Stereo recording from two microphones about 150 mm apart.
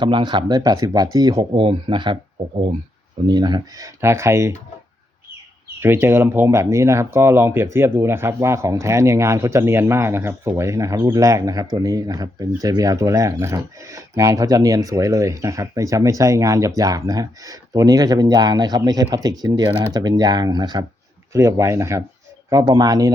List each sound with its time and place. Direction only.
0.0 s speech: 30° right (ahead or behind)
3.2 s speech: 30° right (ahead or behind)
5.8 s speech: 15° right (ahead or behind)